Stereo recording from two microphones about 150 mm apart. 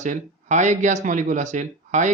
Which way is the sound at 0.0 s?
55° right (ahead or behind).